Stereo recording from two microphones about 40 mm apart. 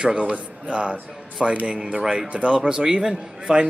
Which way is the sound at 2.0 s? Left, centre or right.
Centre.